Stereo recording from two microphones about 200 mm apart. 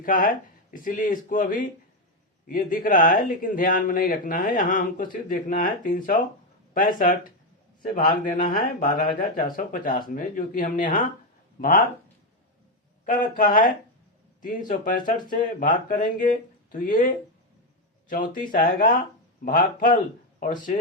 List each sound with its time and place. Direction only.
0.0 s a man's voice: 45° left (ahead or behind)
13.1 s a man's voice: 40° left (ahead or behind)